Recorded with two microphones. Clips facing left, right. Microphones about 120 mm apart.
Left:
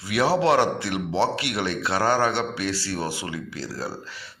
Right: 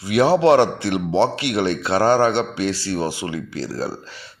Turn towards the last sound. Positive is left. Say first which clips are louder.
# right 5 dB
turn(degrees=-25)  # may be behind; listen again after turning